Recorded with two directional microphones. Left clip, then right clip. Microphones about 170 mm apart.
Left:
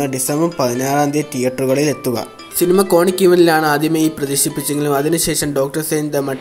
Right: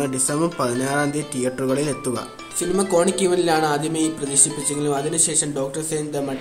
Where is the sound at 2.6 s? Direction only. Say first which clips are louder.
Left 7 dB; 40° left (ahead or behind).